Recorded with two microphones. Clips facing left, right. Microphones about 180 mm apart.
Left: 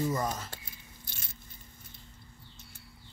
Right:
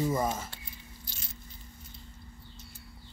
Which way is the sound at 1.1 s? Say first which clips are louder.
Right 1 dB; 50° left (ahead or behind).